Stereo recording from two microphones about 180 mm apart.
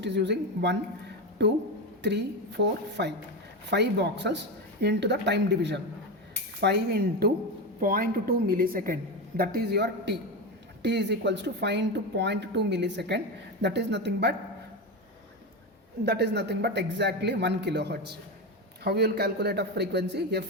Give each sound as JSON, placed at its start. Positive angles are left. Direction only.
{"t": 0.0, "sound": "speech", "side_deg": -75}
{"t": 7.8, "sound": "a woman's voice", "side_deg": -50}
{"t": 16.0, "sound": "speech", "side_deg": -70}